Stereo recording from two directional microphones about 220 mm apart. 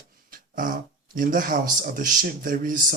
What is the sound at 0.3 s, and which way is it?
Speech, 40° right (ahead or behind).